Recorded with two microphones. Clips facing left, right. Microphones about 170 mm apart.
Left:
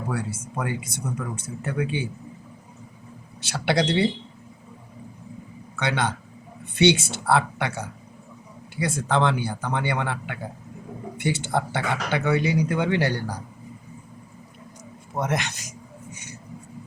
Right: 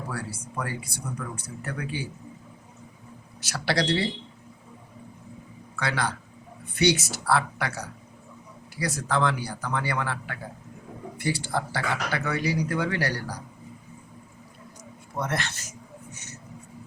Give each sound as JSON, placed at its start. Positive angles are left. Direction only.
{"t": 0.1, "sound": "speech", "side_deg": 20}
{"t": 3.4, "sound": "speech", "side_deg": 25}
{"t": 5.7, "sound": "a man's voice", "side_deg": 25}
{"t": 15.2, "sound": "speech", "side_deg": 15}